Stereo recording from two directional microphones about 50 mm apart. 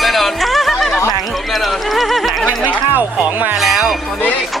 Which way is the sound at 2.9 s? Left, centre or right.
Right.